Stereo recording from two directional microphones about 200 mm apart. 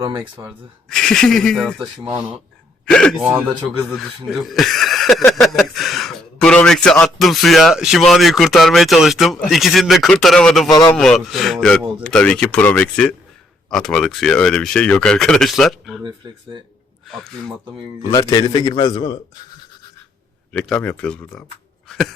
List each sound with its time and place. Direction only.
0.0 s speech: 15° right (ahead or behind)
0.9 s speech: 5° left (ahead or behind)
2.9 s speech: 5° left (ahead or behind)
17.1 s speech: centre (ahead or behind)
18.1 s a man's voice: 20° left (ahead or behind)
20.5 s speech: 5° left (ahead or behind)
21.8 s a sound: centre (ahead or behind)